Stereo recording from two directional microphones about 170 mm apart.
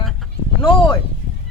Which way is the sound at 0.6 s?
30° left (ahead or behind).